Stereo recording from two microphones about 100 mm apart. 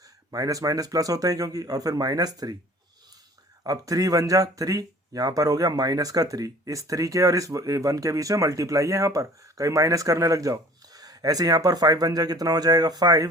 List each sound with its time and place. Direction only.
0.3 s speech: 35° right (ahead or behind)
3.6 s speech: 35° right (ahead or behind)